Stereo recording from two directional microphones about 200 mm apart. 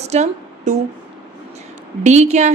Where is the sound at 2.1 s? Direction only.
35° right (ahead or behind).